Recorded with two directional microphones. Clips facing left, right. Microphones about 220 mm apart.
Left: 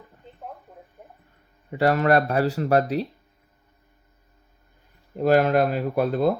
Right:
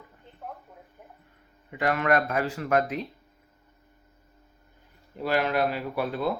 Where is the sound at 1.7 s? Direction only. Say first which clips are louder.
Left 5 dB; 35° left (ahead or behind).